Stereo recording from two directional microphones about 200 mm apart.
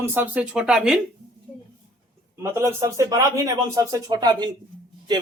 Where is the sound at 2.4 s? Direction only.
10° right (ahead or behind).